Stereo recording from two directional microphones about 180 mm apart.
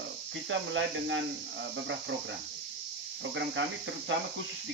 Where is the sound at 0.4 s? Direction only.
90° right.